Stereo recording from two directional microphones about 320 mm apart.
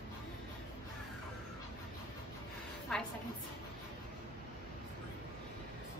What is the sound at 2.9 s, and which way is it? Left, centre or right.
Speech, centre.